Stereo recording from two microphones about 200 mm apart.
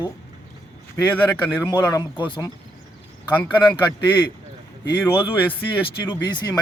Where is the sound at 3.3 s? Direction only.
10° left (ahead or behind).